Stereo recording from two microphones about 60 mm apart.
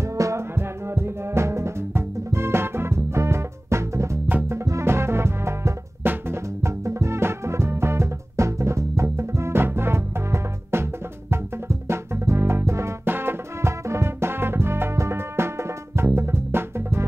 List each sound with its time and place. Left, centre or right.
0.0 s music: right
13.1 s music: right